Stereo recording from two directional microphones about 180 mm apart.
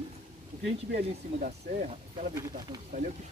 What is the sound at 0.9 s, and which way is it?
Speech, 65° right (ahead or behind).